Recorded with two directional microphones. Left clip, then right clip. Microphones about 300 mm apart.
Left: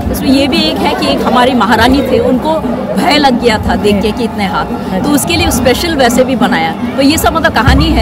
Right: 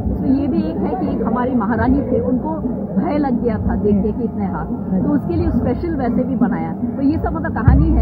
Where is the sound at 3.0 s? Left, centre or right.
Centre.